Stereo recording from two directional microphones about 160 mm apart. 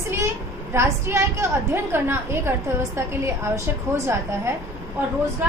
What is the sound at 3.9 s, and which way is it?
Speech, 15° right (ahead or behind).